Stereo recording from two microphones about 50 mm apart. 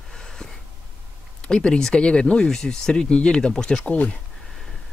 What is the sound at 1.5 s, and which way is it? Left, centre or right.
Speech, centre.